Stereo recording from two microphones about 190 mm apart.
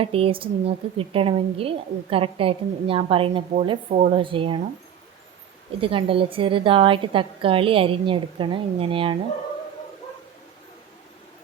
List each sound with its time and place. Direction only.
0.0 s a woman's voice: 30° right (ahead or behind)
4.1 s a woman's voice: 25° right (ahead or behind)
5.8 s a woman's voice: 30° right (ahead or behind)